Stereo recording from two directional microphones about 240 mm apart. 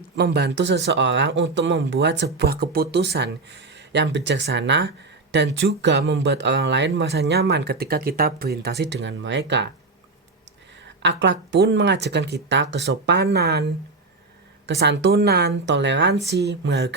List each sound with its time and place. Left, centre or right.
0.2 s speech: right
10.8 s speech: right
14.7 s speech: right